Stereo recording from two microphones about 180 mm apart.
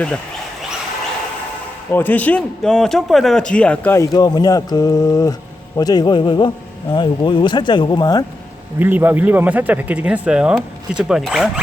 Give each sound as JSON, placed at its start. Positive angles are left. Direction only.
{"t": 1.9, "sound": "speech", "side_deg": 10}
{"t": 8.8, "sound": "speech", "side_deg": -10}